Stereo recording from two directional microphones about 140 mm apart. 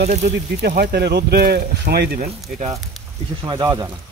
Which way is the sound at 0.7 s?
90° right.